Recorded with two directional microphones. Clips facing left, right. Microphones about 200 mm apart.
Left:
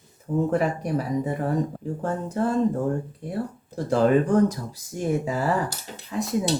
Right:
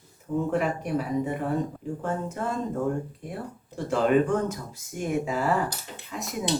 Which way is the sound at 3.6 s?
40° left (ahead or behind).